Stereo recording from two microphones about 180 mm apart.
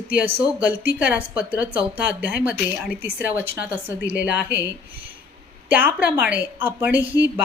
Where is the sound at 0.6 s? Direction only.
10° right (ahead or behind).